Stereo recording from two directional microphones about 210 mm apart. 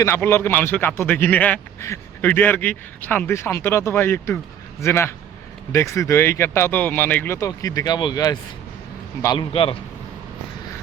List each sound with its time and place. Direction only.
0.0 s a man's voice: 10° left (ahead or behind)